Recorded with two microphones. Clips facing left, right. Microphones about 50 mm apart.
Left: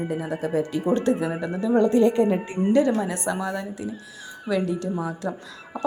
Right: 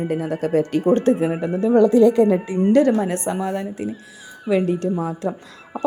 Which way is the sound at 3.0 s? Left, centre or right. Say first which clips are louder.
Right 4 dB; right.